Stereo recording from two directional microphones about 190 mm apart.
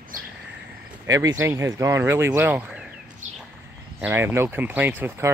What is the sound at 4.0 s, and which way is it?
Speech, 10° right (ahead or behind).